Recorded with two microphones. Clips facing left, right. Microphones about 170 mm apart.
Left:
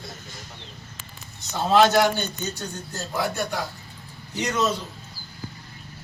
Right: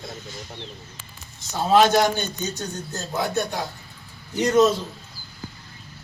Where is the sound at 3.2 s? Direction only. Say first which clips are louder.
Right 2 dB; 25° right (ahead or behind).